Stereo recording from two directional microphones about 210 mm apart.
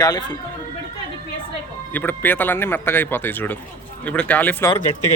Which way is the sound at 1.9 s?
10° left (ahead or behind).